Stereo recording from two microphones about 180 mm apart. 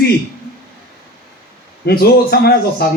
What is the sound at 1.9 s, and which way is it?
Speech, 60° left (ahead or behind).